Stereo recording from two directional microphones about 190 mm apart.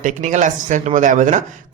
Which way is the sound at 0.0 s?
40° right (ahead or behind).